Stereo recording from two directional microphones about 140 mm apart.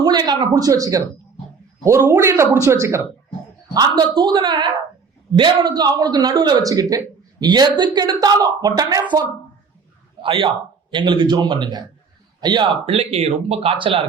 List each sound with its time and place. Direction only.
0.0 s speech: 30° right (ahead or behind)
3.8 s speech: 30° right (ahead or behind)
10.2 s a man's voice: 40° right (ahead or behind)
12.8 s speech: 45° right (ahead or behind)